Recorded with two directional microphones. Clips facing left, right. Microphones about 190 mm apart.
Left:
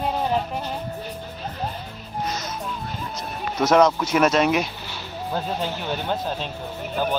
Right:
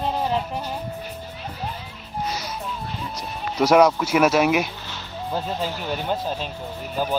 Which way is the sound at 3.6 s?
10° right (ahead or behind).